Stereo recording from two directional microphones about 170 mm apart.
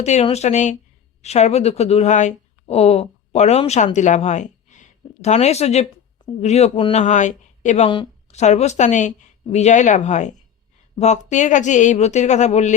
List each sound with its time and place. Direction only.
0.0 s speech: 40° left (ahead or behind)
7.0 s a woman's voice: 45° left (ahead or behind)
7.9 s a sound: 30° left (ahead or behind)
8.4 s a woman's voice: 40° left (ahead or behind)